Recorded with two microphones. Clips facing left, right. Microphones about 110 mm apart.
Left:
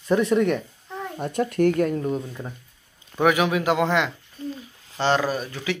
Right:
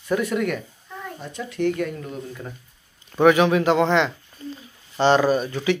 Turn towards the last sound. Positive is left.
turn(degrees=0)  # may be behind; listen again after turning